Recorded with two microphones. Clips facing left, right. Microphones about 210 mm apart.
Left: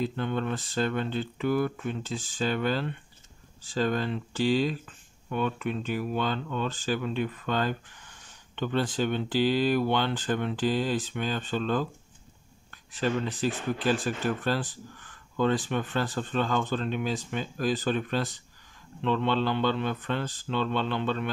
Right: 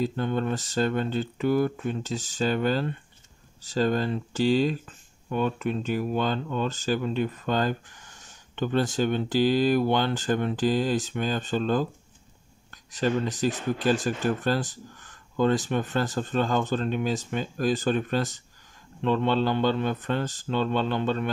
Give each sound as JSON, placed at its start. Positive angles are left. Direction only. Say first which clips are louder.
{"t": 0.0, "sound": "speech", "louder": "right 3 dB", "side_deg": -40}